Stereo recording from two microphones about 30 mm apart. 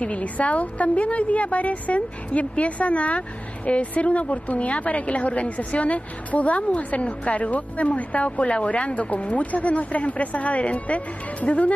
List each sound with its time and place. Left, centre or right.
0.0 s a woman's voice: left